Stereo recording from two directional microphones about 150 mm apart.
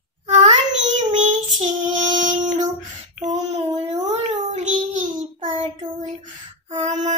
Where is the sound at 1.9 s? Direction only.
30° right (ahead or behind).